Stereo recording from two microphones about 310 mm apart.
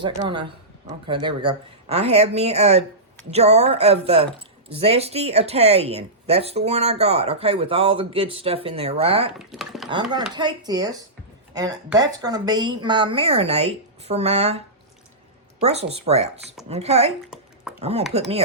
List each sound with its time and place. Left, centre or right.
0.0 s speech: centre
9.4 s speech: centre
10.3 s speech: centre
15.6 s speech: centre